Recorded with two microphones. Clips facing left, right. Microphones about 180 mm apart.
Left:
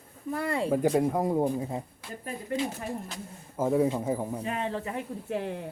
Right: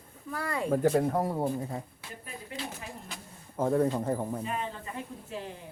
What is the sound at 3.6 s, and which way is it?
Speech, 5° left (ahead or behind).